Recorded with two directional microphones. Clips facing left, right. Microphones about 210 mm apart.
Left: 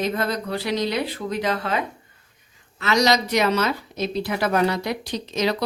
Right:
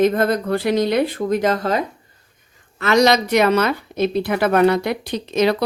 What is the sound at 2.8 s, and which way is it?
Speech, 55° right (ahead or behind).